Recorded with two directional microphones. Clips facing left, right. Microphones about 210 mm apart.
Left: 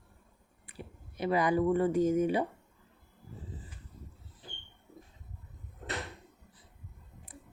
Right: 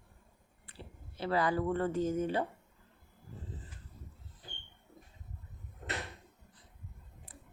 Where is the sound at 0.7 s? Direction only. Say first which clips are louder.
Left 4 dB; 15° left (ahead or behind).